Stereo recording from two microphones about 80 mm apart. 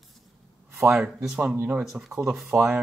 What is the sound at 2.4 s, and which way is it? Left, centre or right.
Speech, right.